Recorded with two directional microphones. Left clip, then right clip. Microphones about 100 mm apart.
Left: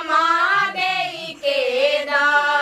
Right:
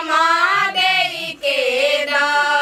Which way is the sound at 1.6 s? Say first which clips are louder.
Right 2 dB; 10° right (ahead or behind).